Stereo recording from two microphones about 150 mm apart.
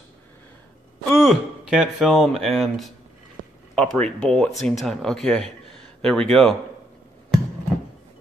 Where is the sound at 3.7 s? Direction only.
5° left (ahead or behind).